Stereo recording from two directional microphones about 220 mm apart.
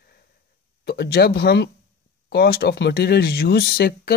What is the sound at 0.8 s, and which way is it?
Speech, 45° left (ahead or behind).